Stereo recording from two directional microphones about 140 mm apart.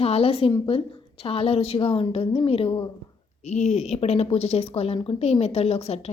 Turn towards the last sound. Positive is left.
turn(degrees=50)  # may be behind; listen again after turning